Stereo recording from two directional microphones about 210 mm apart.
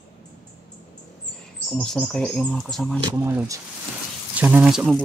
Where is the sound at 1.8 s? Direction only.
5° left (ahead or behind).